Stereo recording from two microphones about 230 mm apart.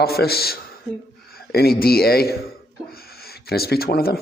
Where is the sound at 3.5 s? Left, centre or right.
Left.